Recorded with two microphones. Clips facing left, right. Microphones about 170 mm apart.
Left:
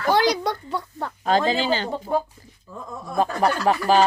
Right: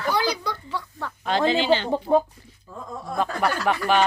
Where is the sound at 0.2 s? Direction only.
65° left (ahead or behind).